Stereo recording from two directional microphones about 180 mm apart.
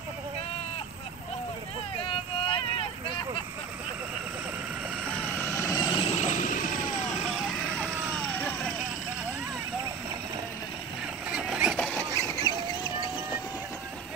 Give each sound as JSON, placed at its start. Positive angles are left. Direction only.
{"t": 2.0, "sound": "vehicle", "side_deg": 30}
{"t": 5.1, "sound": "vehicle", "side_deg": 10}
{"t": 8.4, "sound": "vehicle", "side_deg": 10}
{"t": 11.2, "sound": "vehicle", "side_deg": -5}
{"t": 11.7, "sound": "rodents", "side_deg": 5}
{"t": 12.1, "sound": "vehicle", "side_deg": 15}